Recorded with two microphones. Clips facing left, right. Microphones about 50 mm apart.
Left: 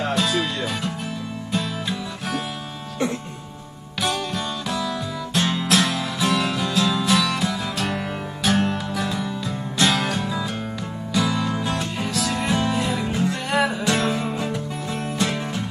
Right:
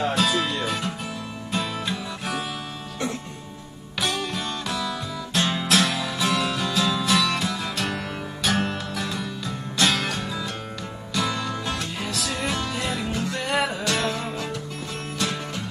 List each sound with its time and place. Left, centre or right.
0.1 s music: centre
4.0 s music: centre
13.8 s music: left